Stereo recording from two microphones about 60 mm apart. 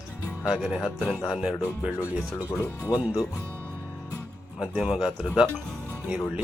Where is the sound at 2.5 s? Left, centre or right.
Left.